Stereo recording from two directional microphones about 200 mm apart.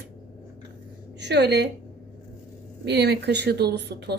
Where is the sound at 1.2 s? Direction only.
55° right (ahead or behind).